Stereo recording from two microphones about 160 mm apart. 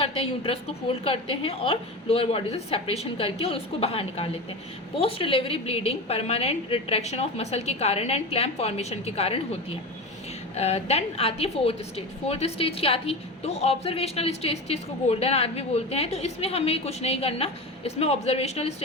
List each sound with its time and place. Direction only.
0.0 s a woman's voice: 35° left (ahead or behind)